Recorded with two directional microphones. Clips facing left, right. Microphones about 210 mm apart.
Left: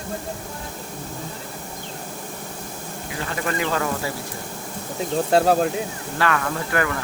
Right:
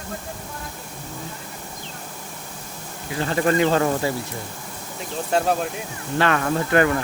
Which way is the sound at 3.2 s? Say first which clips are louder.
Right 7 dB; 30° right (ahead or behind).